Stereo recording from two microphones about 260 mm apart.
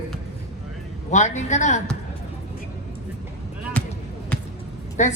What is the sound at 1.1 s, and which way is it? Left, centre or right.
Speech, left.